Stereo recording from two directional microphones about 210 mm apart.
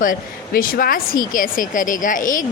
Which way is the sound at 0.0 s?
40° left (ahead or behind).